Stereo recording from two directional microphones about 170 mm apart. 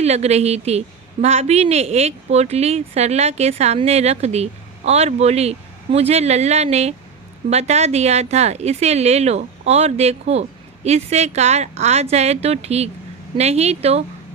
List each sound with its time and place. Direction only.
0.0 s a woman's voice: 40° right (ahead or behind)